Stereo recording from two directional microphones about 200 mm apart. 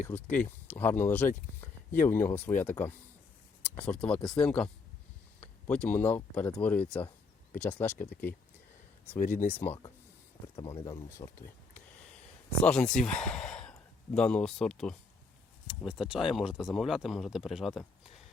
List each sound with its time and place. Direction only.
0.0 s speech: 10° left (ahead or behind)
9.0 s speech: 10° left (ahead or behind)
12.6 s speech: 5° left (ahead or behind)